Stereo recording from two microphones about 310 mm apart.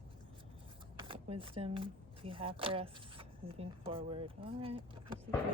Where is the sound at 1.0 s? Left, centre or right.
Centre.